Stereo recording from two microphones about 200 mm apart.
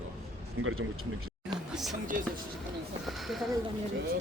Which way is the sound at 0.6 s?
90° right.